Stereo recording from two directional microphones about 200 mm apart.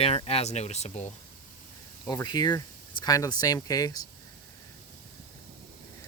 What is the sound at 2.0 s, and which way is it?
Speech, 20° left (ahead or behind).